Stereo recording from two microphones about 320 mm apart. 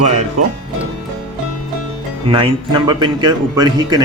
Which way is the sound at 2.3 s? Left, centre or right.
Centre.